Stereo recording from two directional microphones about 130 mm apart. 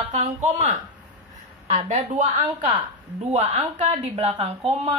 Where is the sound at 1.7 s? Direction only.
65° right (ahead or behind).